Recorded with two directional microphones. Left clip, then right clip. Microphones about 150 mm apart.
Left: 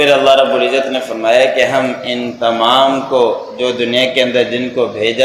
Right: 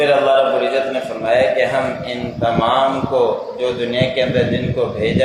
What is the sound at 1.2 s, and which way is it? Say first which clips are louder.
A man's voice: left 4 dB; 35° left (ahead or behind).